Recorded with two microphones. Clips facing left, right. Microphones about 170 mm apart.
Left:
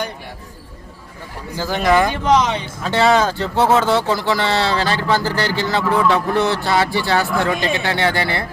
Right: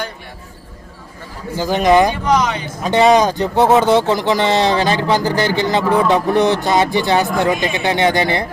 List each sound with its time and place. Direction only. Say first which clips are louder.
1.5 s speech: right 4 dB; 20° right (ahead or behind)
2.2 s speech: even; 25° left (ahead or behind)
2.8 s speech: right 4 dB; 15° right (ahead or behind)